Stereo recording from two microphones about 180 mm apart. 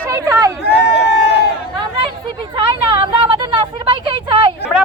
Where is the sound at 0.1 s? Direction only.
20° right (ahead or behind).